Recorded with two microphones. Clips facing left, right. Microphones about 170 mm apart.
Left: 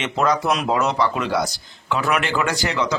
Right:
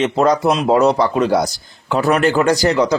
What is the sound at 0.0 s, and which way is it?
Speech, 35° right (ahead or behind).